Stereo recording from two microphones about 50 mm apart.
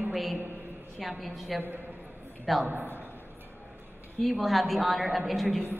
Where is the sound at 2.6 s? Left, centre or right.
Right.